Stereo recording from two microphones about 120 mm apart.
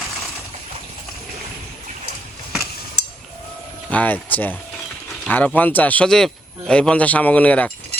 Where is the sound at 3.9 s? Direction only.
15° left (ahead or behind).